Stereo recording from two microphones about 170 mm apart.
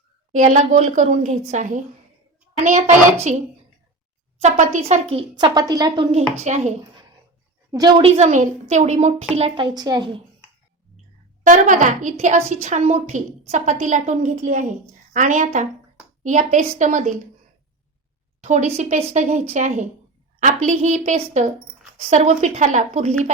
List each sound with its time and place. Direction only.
0.3 s a woman's voice: 45° right (ahead or behind)
5.5 s a woman's voice: 20° right (ahead or behind)
6.4 s a woman's voice: 45° right (ahead or behind)
7.7 s a woman's voice: 25° right (ahead or behind)
8.1 s a woman's voice: 45° right (ahead or behind)
9.7 s a woman's voice: 25° right (ahead or behind)
11.4 s a woman's voice: 50° right (ahead or behind)
18.4 s a woman's voice: 40° right (ahead or behind)